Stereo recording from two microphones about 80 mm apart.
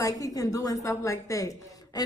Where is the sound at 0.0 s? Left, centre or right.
Left.